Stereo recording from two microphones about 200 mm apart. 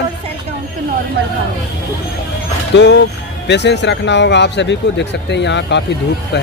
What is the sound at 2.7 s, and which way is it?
Speech, 60° left (ahead or behind).